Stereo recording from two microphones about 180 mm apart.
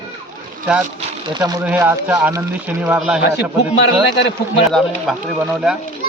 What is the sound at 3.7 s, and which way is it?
Speech, 70° left (ahead or behind).